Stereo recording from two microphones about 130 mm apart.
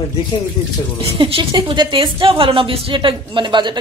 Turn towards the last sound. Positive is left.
turn(degrees=-40)  # may be behind; listen again after turning